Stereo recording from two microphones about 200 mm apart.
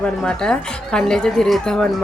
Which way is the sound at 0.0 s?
5° left (ahead or behind).